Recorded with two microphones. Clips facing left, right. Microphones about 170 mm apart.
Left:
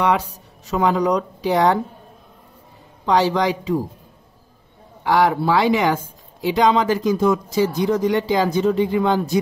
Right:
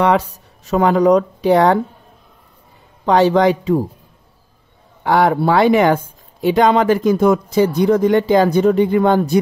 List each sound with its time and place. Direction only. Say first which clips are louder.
0.7 s speech: right 6 dB; 60° right (ahead or behind)
3.1 s speech: right 5 dB; 55° right (ahead or behind)
5.0 s speech: right 3 dB; 55° right (ahead or behind)